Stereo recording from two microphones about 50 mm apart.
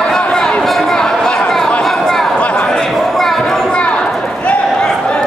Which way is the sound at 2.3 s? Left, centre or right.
Left.